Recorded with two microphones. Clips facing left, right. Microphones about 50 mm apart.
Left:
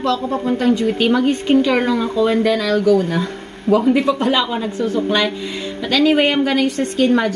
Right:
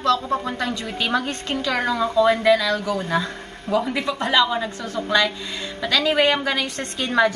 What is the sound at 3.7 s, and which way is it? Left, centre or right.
Speech, left.